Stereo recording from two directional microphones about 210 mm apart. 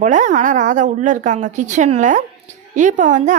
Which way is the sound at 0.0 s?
35° right (ahead or behind).